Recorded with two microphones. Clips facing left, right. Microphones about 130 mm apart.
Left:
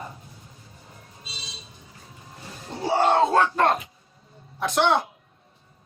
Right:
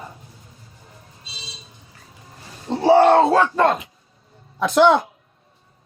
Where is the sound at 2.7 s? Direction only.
75° right (ahead or behind).